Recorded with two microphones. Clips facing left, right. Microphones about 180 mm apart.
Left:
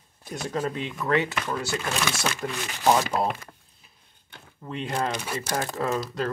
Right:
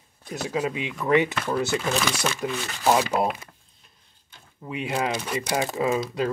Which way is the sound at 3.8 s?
5° left (ahead or behind).